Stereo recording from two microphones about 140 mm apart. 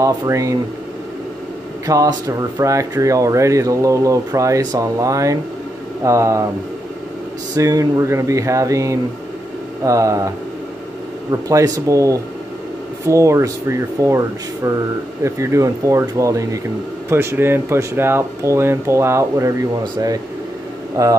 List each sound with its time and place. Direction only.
0.0 s speech: 20° right (ahead or behind)
1.9 s speech: 25° right (ahead or behind)
7.5 s speech: 25° right (ahead or behind)
11.4 s speech: 25° right (ahead or behind)